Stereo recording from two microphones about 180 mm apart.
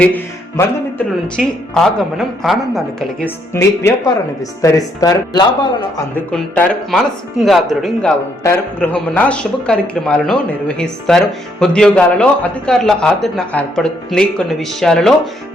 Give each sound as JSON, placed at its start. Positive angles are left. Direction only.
{"t": 0.0, "sound": "a man's voice", "side_deg": 10}
{"t": 3.2, "sound": "speech", "side_deg": 15}
{"t": 6.1, "sound": "a man's voice", "side_deg": 5}